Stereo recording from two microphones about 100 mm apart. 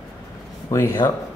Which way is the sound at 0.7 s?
30° left (ahead or behind).